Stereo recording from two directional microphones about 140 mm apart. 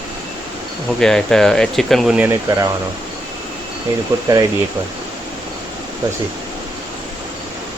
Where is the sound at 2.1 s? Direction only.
15° right (ahead or behind).